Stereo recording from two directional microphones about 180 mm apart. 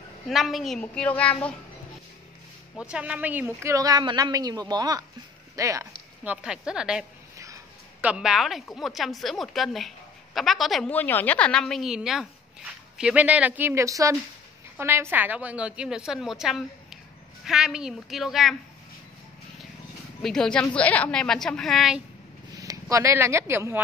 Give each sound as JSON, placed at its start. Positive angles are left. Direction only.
{"t": 0.3, "sound": "speech", "side_deg": 0}
{"t": 2.8, "sound": "a woman's voice", "side_deg": -5}
{"t": 7.3, "sound": "a sound", "side_deg": -15}
{"t": 8.1, "sound": "speech", "side_deg": -5}
{"t": 20.2, "sound": "speech", "side_deg": 0}
{"t": 22.6, "sound": "speech", "side_deg": -15}